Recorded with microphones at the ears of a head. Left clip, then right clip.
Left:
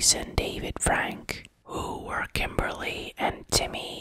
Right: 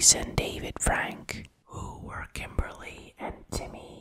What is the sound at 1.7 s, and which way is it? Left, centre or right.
Whispering, left.